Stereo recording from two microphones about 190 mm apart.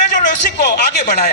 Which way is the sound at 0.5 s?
60° left (ahead or behind).